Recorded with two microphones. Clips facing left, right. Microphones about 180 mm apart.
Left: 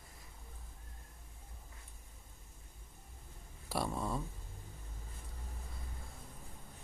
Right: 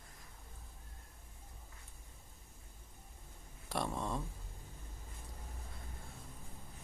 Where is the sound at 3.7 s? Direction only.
5° left (ahead or behind).